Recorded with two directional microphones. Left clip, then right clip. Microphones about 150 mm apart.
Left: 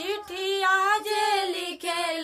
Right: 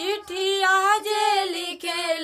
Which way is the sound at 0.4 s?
25° right (ahead or behind).